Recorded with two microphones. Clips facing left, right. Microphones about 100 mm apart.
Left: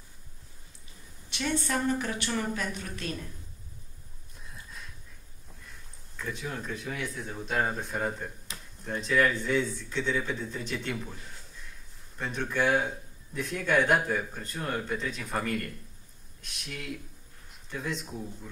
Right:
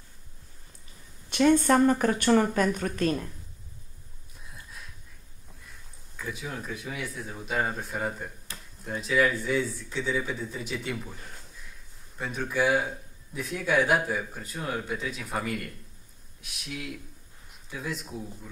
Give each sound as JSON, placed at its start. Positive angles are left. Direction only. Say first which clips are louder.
{"t": 1.3, "sound": "speech", "louder": "right 10 dB", "side_deg": -45}
{"t": 4.4, "sound": "a sound", "louder": "even", "side_deg": 0}
{"t": 5.6, "sound": "a man's voice", "louder": "even", "side_deg": -5}